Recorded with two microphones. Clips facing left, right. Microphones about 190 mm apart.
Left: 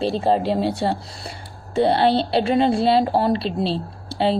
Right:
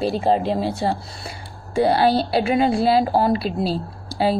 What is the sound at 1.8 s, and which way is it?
Speech, 25° left (ahead or behind).